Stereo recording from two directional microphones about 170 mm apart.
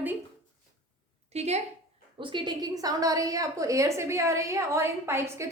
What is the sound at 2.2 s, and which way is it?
A woman's voice, 30° right (ahead or behind).